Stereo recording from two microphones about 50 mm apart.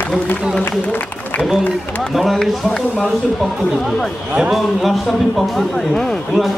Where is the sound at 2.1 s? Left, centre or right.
Centre.